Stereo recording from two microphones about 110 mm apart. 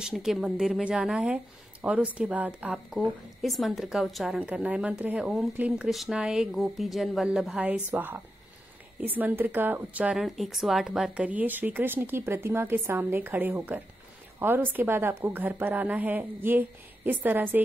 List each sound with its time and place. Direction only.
0.0 s speech: 5° right (ahead or behind)
3.4 s speech: centre (ahead or behind)
10.1 s speech: centre (ahead or behind); by 17.6 s 15° right (ahead or behind)